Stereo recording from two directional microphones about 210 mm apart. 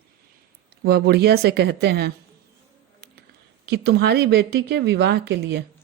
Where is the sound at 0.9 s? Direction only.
50° right (ahead or behind).